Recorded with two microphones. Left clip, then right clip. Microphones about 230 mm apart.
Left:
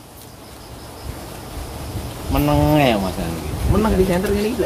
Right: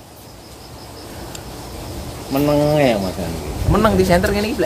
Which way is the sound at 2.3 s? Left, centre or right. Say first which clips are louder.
Right 1 dB; left.